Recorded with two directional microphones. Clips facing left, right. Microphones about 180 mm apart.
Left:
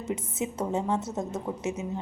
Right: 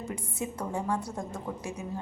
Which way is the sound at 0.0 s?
20° left (ahead or behind).